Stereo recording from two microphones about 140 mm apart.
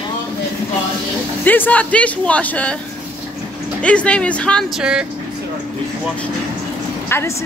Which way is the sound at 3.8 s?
10° left (ahead or behind).